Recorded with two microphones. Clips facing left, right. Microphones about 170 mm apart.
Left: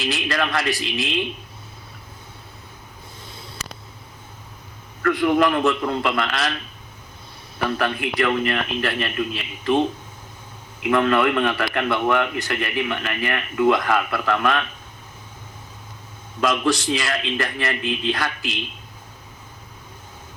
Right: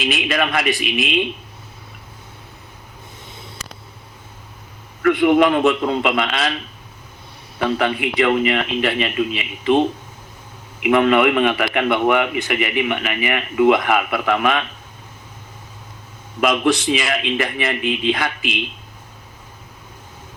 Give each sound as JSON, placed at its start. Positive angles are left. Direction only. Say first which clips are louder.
{"t": 0.0, "sound": "a man's voice", "louder": "right 3 dB", "side_deg": -15}
{"t": 5.0, "sound": "a man's voice", "louder": "right 4 dB", "side_deg": -20}
{"t": 7.6, "sound": "a man's voice", "louder": "right 4 dB", "side_deg": -15}
{"t": 16.4, "sound": "a man's voice", "louder": "right 3 dB", "side_deg": -15}